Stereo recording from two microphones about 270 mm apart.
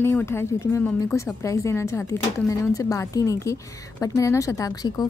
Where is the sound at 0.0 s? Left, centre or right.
Centre.